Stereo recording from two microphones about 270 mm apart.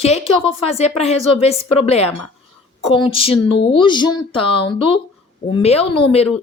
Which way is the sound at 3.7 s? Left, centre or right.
Centre.